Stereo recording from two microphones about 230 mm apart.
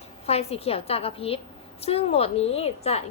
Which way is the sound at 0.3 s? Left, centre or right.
Left.